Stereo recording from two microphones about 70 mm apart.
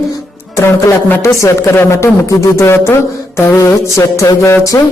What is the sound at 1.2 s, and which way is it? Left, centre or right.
Speech, left.